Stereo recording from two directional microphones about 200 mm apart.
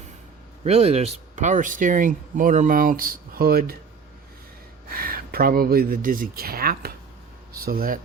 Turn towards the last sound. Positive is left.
turn(degrees=-45)  # may be behind; listen again after turning